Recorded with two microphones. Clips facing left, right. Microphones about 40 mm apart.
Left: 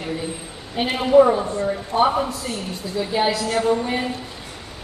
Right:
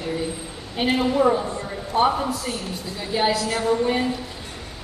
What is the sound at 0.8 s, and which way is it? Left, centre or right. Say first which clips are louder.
Speech: right 1 dB; centre.